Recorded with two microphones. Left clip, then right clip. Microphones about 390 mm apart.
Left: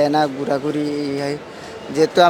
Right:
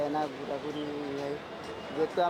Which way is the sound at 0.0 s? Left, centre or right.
Left.